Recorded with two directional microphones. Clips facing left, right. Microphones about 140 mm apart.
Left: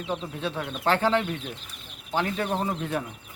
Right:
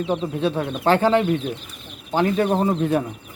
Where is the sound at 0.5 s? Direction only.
45° right (ahead or behind).